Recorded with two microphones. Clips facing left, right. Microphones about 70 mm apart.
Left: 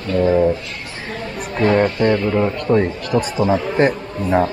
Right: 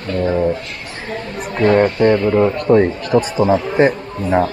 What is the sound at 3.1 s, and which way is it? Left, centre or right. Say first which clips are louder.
Speech: right 3 dB; right.